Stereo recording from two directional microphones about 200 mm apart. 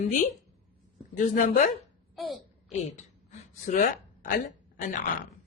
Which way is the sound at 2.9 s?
35° left (ahead or behind).